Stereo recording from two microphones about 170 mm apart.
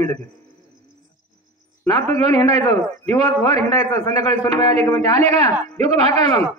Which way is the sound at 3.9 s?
15° left (ahead or behind).